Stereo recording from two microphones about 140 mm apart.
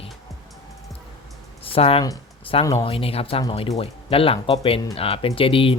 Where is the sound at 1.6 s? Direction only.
40° left (ahead or behind).